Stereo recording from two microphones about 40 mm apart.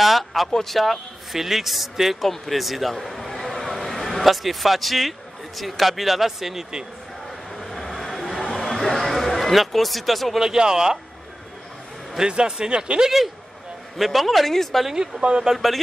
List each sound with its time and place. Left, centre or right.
0.0 s a sound: centre
0.7 s a man's voice: centre
7.5 s a sound: centre
10.4 s speech: centre
12.3 s speech: right
13.9 s a man's voice: centre
14.9 s speech: centre
15.5 s a man's voice: centre